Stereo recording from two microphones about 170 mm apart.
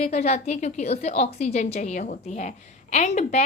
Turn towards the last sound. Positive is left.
turn(degrees=40)  # may be behind; listen again after turning